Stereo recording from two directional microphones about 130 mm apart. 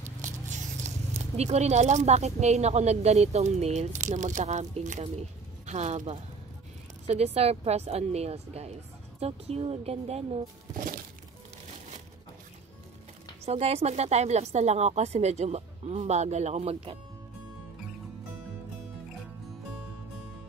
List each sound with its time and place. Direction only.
0.2 s a sound: 70° right (ahead or behind)
0.8 s speech: 55° right (ahead or behind)
7.3 s a woman's voice: 55° right (ahead or behind)
13.5 s speech: 55° right (ahead or behind)